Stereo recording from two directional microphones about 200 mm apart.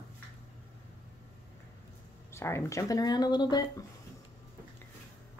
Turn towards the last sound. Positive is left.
turn(degrees=20)  # may be behind; listen again after turning